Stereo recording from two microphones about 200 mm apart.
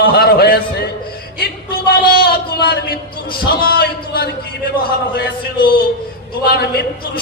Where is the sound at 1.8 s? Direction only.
50° left (ahead or behind).